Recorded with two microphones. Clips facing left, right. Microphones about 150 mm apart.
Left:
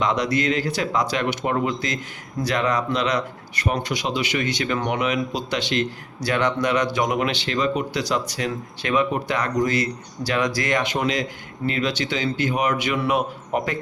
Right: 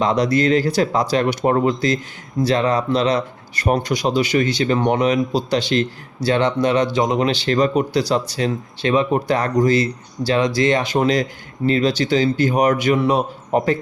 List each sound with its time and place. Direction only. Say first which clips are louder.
0.0 s speech: right 5 dB; 35° right (ahead or behind)